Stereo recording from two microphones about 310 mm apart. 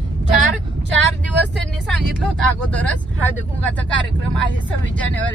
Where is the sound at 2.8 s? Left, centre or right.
Centre.